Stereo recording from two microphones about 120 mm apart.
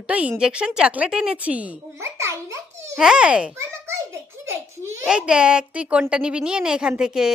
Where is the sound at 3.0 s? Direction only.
5° right (ahead or behind).